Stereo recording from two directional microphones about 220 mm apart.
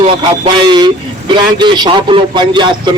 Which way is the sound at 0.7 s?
20° right (ahead or behind).